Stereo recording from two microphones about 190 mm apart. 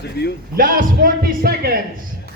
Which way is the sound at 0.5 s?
45° right (ahead or behind).